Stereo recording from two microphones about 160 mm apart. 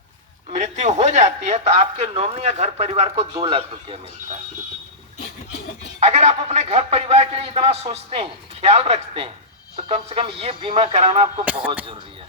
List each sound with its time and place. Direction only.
0.5 s a man's voice: 45° right (ahead or behind)
6.0 s a man's voice: 40° right (ahead or behind)
11.4 s speech: 10° right (ahead or behind)